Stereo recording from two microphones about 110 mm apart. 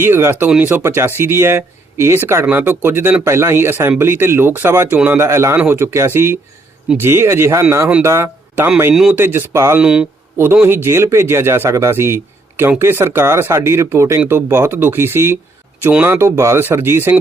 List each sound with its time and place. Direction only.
0.0 s speech: 20° right (ahead or behind)
9.8 s speech: 5° right (ahead or behind)
10.3 s speech: 20° right (ahead or behind)